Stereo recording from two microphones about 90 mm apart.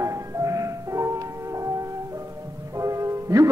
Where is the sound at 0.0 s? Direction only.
35° right (ahead or behind).